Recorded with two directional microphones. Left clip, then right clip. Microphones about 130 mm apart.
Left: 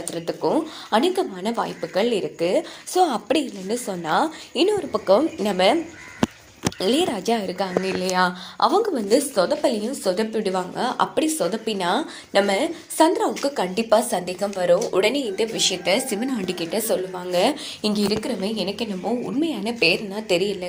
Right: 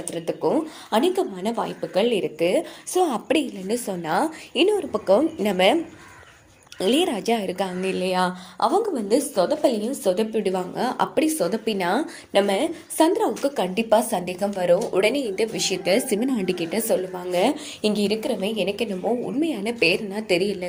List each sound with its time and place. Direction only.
0.1 s a woman's voice: 15° right (ahead or behind); by 12.0 s 35° right (ahead or behind)
12.3 s a woman's voice: 15° right (ahead or behind)
14.3 s a woman's voice: 30° right (ahead or behind)
14.8 s a woman's voice: 15° right (ahead or behind)